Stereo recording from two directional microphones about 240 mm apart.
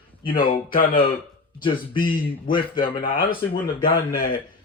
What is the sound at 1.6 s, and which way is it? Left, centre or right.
Speech, left.